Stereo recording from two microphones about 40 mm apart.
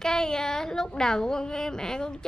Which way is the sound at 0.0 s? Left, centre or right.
Centre.